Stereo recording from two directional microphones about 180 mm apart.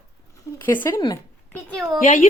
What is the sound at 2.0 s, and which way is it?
Speech, 45° left (ahead or behind).